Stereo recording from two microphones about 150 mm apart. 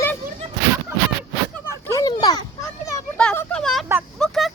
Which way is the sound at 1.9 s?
25° left (ahead or behind).